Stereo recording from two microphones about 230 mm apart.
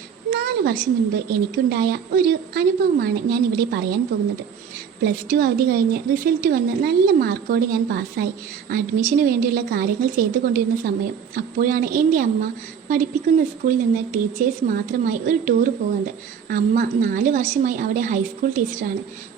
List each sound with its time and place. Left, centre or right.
0.3 s a sound: right
1.3 s a woman's voice: right
5.0 s a woman's voice: right